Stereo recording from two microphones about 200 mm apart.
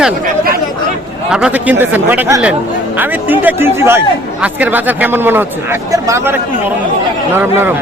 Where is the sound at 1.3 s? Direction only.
5° right (ahead or behind).